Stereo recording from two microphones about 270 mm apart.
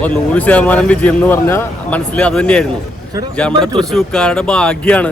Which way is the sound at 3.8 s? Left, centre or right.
Centre.